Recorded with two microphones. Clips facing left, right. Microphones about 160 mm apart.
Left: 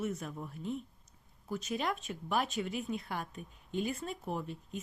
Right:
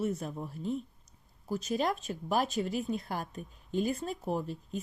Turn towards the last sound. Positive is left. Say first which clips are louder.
# right 5 dB
turn(degrees=-35)  # may be behind; listen again after turning